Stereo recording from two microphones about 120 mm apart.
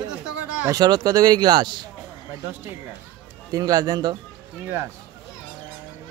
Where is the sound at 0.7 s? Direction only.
30° right (ahead or behind).